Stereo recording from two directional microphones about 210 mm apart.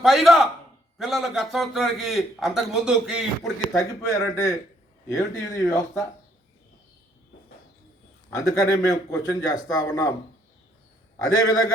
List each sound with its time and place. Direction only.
0.0 s a man's voice: centre (ahead or behind)
3.8 s a man's voice: 15° left (ahead or behind)
8.3 s a man's voice: 15° left (ahead or behind)
11.2 s a man's voice: 15° left (ahead or behind)